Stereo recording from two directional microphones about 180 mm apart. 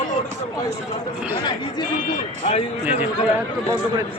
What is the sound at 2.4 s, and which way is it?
Speech, 35° left (ahead or behind).